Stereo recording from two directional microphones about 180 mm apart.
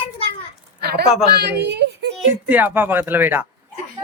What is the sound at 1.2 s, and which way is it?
Speech, 65° right (ahead or behind).